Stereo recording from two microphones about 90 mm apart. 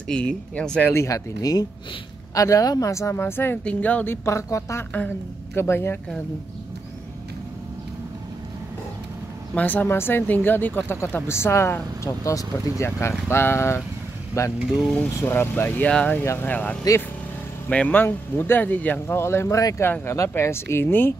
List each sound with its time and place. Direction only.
0.1 s speech: 10° left (ahead or behind)
0.9 s speech: 40° left (ahead or behind)
4.9 s speech: 15° left (ahead or behind)
5.6 s speech: 25° left (ahead or behind)
9.6 s speech: 20° left (ahead or behind)